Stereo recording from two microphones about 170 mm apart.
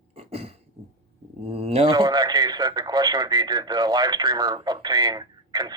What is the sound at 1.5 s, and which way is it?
Speech, 35° right (ahead or behind).